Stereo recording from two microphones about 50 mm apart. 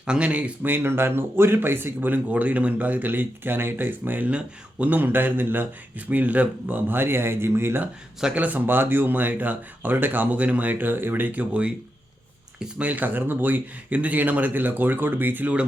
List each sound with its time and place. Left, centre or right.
0.0 s speech: right
0.6 s speech: right
4.3 s speech: right
4.9 s speech: right
8.4 s speech: right
12.8 s speech: right